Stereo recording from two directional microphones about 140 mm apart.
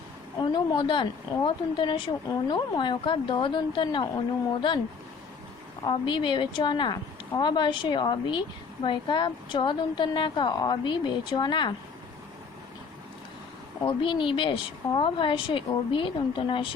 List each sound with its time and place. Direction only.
0.3 s speech: 35° left (ahead or behind)
5.8 s speech: 35° left (ahead or behind)
13.8 s speech: 35° left (ahead or behind)